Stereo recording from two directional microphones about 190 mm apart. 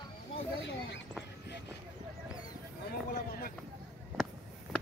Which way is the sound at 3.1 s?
50° left (ahead or behind).